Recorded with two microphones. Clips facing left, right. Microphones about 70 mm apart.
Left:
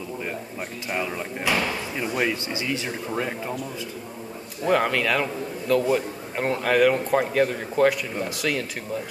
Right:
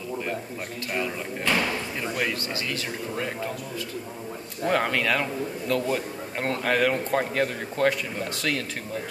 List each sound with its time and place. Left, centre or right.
0.9 s speech: centre
4.6 s a man's voice: centre